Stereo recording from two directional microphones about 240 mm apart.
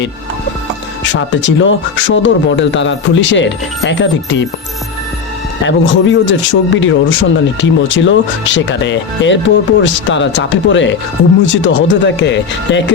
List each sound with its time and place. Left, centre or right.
1.0 s speech: left
5.6 s speech: left